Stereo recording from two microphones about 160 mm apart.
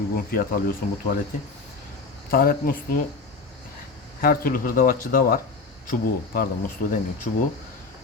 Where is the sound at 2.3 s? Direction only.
65° left (ahead or behind).